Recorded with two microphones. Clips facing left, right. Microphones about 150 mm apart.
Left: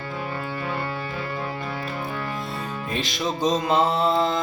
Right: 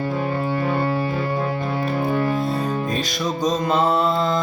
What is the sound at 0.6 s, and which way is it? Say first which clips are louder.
Music: right 7 dB; 40° right (ahead or behind).